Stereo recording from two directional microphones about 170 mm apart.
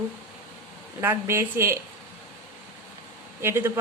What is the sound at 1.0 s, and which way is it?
Speech, 15° right (ahead or behind).